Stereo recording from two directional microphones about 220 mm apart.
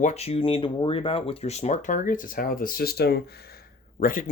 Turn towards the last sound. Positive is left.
turn(degrees=40)  # may be behind; listen again after turning